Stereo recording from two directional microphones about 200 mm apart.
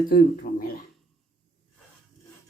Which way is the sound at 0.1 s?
45° left (ahead or behind).